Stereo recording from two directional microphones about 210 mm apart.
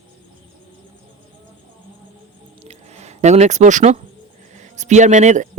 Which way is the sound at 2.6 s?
30° right (ahead or behind).